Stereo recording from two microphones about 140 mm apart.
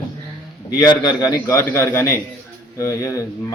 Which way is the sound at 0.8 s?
30° left (ahead or behind).